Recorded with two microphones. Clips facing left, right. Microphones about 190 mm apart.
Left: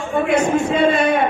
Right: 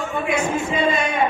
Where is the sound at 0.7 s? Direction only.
60° left (ahead or behind).